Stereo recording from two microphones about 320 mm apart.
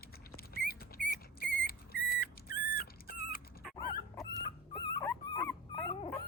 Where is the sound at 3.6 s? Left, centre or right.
Centre.